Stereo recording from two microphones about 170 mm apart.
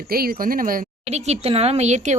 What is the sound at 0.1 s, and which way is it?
Speech, 60° right (ahead or behind).